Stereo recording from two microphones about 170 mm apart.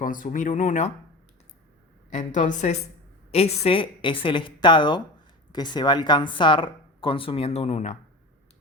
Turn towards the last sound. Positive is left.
turn(degrees=40)  # may be behind; listen again after turning